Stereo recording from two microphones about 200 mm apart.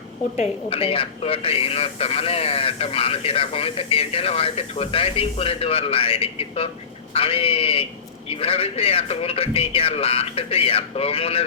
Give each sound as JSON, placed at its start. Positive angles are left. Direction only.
{"t": 0.3, "sound": "speech", "side_deg": 30}